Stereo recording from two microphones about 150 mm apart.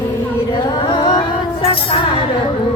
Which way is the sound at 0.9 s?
30° left (ahead or behind).